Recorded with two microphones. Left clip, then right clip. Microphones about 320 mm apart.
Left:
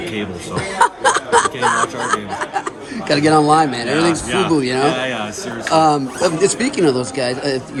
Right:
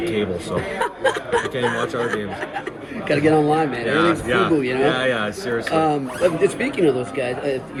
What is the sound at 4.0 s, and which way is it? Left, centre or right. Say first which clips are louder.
A man's voice: left 1 dB; centre.